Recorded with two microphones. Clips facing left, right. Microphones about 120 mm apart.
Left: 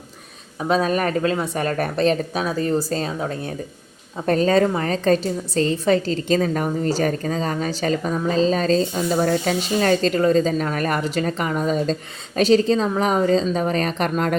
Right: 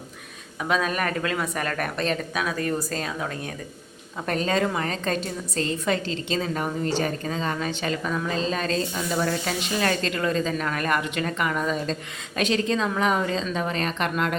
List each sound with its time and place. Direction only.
0.6 s a woman's voice: 35° left (ahead or behind)